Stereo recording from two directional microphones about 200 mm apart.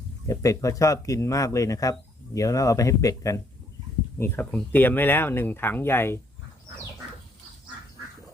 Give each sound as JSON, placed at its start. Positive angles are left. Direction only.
{"t": 0.3, "sound": "speech", "side_deg": 15}